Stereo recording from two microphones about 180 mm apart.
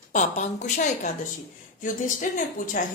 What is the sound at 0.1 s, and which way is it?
A woman's voice, 40° left (ahead or behind).